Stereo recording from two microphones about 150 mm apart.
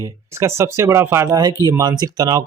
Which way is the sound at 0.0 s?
20° right (ahead or behind).